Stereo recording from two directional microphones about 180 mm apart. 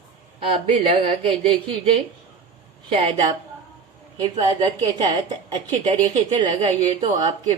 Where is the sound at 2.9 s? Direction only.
30° right (ahead or behind).